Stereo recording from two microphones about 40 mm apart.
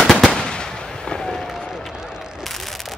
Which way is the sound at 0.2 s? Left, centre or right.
Centre.